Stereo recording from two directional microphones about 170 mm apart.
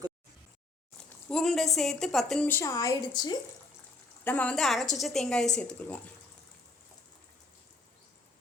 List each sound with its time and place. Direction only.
1.3 s a woman's voice: 5° left (ahead or behind)
2.5 s a woman's voice: 15° left (ahead or behind)
4.2 s a woman's voice: 10° left (ahead or behind)